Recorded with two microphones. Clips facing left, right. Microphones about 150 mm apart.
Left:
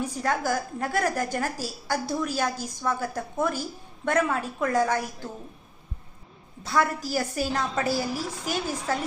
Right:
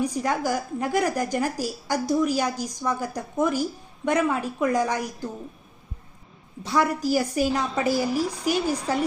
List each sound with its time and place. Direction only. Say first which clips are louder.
0.0 s a woman's voice: right 2 dB; 15° right (ahead or behind)
6.7 s a woman's voice: right 3 dB; 15° right (ahead or behind)